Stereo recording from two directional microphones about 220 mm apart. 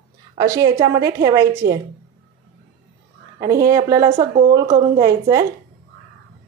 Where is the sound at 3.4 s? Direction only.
15° right (ahead or behind).